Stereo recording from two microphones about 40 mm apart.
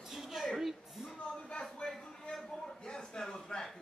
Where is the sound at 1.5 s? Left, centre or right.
Centre.